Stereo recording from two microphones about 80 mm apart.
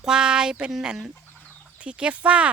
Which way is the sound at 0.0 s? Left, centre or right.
Centre.